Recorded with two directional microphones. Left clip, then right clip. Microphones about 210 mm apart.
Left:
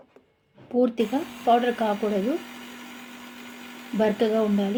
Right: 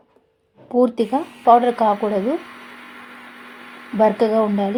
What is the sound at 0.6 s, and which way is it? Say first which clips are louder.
Speech: right 6 dB; 10° right (ahead or behind).